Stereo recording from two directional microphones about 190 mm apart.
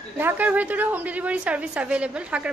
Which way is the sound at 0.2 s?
10° right (ahead or behind).